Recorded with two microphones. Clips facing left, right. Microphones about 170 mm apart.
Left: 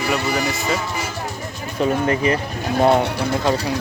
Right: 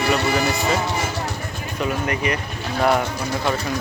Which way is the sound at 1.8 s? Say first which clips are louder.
Left 5 dB; 30° left (ahead or behind).